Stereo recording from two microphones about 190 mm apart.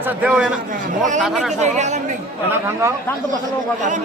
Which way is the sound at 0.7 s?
40° right (ahead or behind).